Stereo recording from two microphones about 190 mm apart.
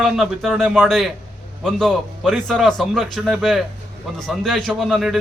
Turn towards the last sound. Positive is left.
turn(degrees=0)  # may be behind; listen again after turning